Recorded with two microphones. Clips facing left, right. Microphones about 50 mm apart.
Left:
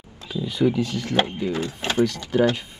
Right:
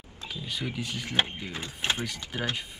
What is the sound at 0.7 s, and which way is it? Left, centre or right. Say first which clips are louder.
Speech: left 7 dB; centre.